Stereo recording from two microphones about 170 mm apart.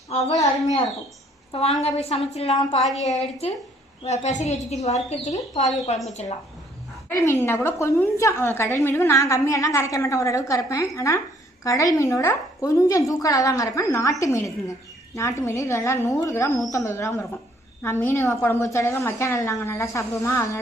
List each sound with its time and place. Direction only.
0.2 s a child's voice: 20° left (ahead or behind)
0.4 s a woman's voice: 45° left (ahead or behind)
2.8 s a woman's voice: centre (ahead or behind)
4.0 s a woman's voice: 40° left (ahead or behind)
7.3 s speech: 15° left (ahead or behind)